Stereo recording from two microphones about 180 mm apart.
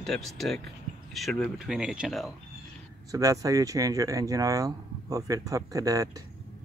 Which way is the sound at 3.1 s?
20° right (ahead or behind).